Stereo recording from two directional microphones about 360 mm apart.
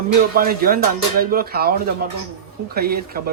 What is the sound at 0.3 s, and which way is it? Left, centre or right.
Speech, right.